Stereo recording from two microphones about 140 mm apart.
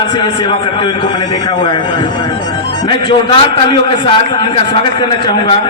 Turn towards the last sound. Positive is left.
turn(degrees=35)  # may be behind; listen again after turning